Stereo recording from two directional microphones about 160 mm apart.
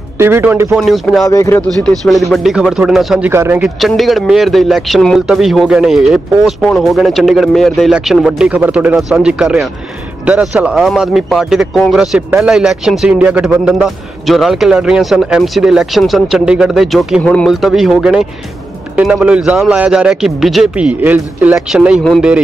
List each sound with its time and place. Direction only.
0.2 s a man's voice: 15° right (ahead or behind)
0.7 s speech: centre (ahead or behind)
1.3 s speech: 20° left (ahead or behind)
1.8 s speech: centre (ahead or behind)
3.3 s a man's voice: 15° right (ahead or behind)
3.6 s speech: centre (ahead or behind)